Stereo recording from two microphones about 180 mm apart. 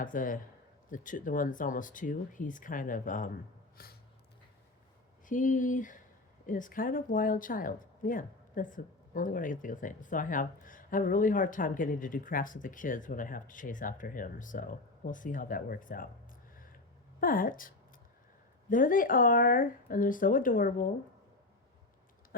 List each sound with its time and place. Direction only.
0.0 s speech: 50° left (ahead or behind)
3.8 s a sound: 55° left (ahead or behind)
5.3 s speech: 45° left (ahead or behind)
17.2 s speech: 50° left (ahead or behind)
18.7 s speech: 50° left (ahead or behind)